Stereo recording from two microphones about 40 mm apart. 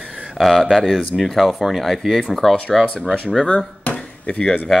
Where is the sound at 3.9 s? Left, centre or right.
Left.